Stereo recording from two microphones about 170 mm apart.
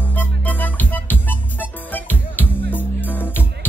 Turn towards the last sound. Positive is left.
turn(degrees=10)  # may be behind; listen again after turning